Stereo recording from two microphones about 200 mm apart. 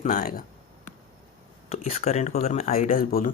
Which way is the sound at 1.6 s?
30° left (ahead or behind).